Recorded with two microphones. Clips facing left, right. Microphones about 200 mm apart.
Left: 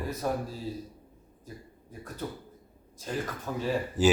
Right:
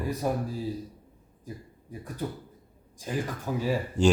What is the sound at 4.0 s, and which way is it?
Speech, 5° left (ahead or behind).